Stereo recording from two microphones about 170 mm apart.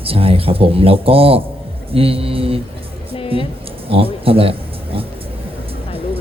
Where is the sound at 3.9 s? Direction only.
35° right (ahead or behind).